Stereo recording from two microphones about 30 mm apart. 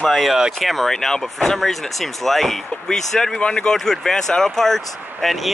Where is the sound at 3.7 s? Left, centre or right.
Centre.